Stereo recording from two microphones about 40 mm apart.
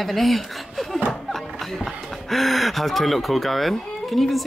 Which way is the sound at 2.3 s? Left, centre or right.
Centre.